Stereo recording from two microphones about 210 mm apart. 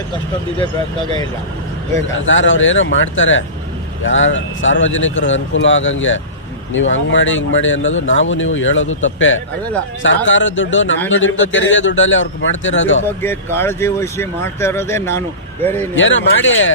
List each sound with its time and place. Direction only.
2.2 s speech: 65° left (ahead or behind)
13.1 s speech: 10° left (ahead or behind)
16.0 s speech: 65° left (ahead or behind)